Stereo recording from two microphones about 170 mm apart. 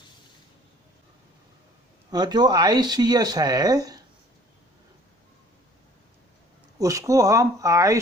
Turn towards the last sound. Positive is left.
turn(degrees=-20)  # may be behind; listen again after turning